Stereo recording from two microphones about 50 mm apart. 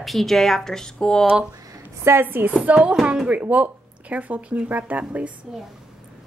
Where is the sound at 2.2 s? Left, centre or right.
Right.